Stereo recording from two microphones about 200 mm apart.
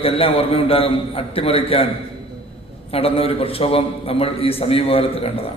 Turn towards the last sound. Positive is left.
turn(degrees=30)  # may be behind; listen again after turning